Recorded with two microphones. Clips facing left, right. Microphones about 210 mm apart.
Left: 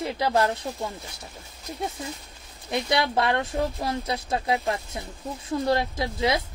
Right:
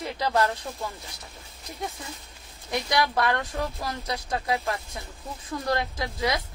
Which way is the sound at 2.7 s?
25° left (ahead or behind).